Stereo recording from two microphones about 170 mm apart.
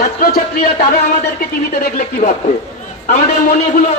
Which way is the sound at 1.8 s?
50° left (ahead or behind).